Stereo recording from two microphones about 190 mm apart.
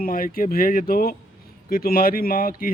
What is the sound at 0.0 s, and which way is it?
Speech, 50° left (ahead or behind).